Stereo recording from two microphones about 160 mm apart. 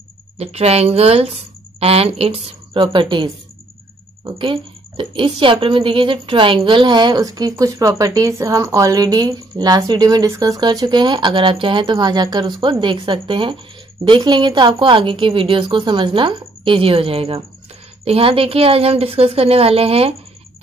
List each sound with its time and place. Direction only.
0.4 s a woman's voice: 40° right (ahead or behind)